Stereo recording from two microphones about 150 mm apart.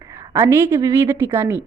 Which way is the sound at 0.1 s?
15° right (ahead or behind).